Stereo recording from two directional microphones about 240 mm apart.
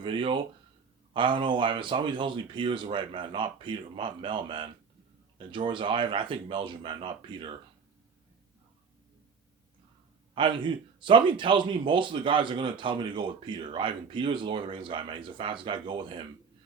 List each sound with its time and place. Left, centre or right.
0.0 s speech: right
10.3 s speech: centre